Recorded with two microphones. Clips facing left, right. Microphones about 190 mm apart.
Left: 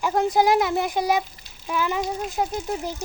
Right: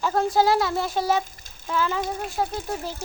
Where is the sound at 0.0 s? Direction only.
15° left (ahead or behind).